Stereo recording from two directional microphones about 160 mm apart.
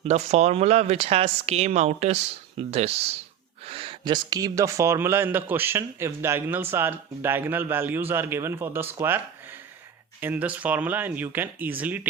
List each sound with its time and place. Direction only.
0.0 s speech: 40° right (ahead or behind); by 12.0 s 10° right (ahead or behind)